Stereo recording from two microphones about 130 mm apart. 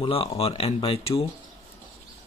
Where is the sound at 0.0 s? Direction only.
45° left (ahead or behind).